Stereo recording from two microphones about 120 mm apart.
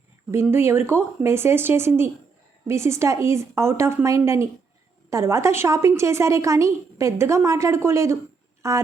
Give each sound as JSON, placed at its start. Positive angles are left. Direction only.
{"t": 0.4, "sound": "a woman's voice", "side_deg": -20}